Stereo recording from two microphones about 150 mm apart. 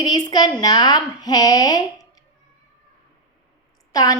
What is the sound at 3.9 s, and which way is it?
Speech, 25° left (ahead or behind).